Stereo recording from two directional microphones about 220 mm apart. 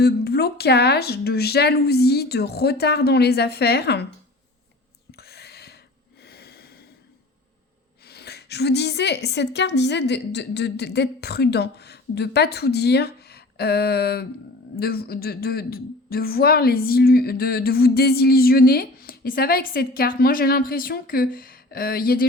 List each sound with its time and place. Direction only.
0.0 s speech: 45° left (ahead or behind)
5.1 s whispering: 45° left (ahead or behind)
6.2 s snort: 45° left (ahead or behind)
8.0 s speech: 45° left (ahead or behind)